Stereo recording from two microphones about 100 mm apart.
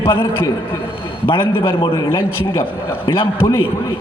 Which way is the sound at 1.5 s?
60° left (ahead or behind).